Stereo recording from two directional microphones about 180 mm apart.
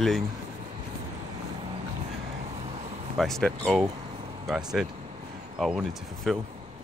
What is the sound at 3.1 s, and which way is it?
Speech, centre (ahead or behind).